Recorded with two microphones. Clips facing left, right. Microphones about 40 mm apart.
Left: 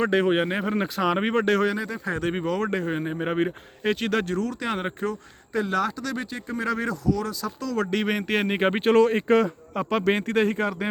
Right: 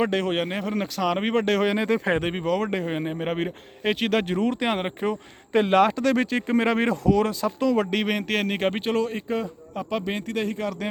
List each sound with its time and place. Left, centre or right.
0.1 s speech: centre
1.2 s speech: centre
1.9 s speech: right
2.4 s speech: centre
4.7 s speech: centre
5.5 s speech: right
6.6 s speech: right
7.4 s speech: right
7.8 s speech: centre
8.8 s speech: left
9.7 s speech: left